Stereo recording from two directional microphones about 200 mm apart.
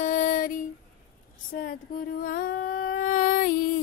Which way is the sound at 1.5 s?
45° left (ahead or behind).